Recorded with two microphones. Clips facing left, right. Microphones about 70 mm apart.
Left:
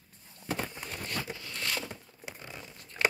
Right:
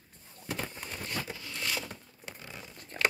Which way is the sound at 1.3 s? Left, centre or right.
Right.